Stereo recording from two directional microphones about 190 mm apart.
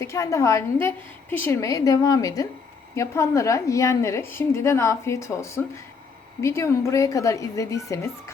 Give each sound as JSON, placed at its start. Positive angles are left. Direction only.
{"t": 0.0, "sound": "a woman's voice", "side_deg": 15}